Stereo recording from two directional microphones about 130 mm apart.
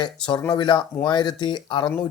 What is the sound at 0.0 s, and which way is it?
Speech, 35° left (ahead or behind).